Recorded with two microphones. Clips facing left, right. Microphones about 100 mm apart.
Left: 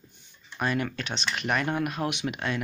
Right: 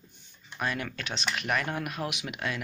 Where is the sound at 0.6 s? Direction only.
Centre (ahead or behind).